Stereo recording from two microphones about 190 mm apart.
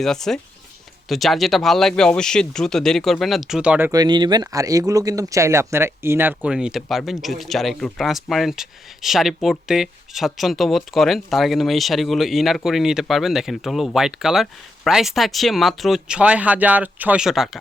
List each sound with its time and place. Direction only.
0.0 s speech: centre (ahead or behind)
3.9 s speech: 20° right (ahead or behind); by 17.6 s centre (ahead or behind)